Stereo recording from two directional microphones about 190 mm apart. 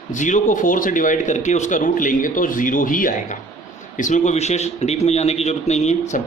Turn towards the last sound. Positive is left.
turn(degrees=35)  # may be behind; listen again after turning